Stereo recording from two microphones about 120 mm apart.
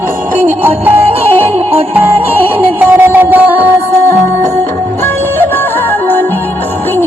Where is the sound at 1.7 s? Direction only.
15° right (ahead or behind).